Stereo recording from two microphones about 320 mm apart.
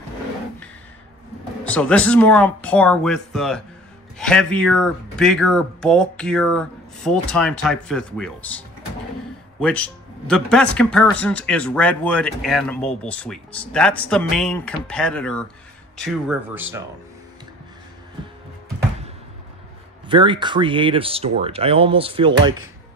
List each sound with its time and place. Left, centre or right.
1.6 s speech: centre
20.1 s speech: centre